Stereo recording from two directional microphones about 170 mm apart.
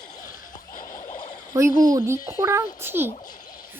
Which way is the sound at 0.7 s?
50° left (ahead or behind).